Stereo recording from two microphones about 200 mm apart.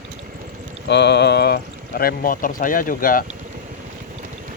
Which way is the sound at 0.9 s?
60° left (ahead or behind).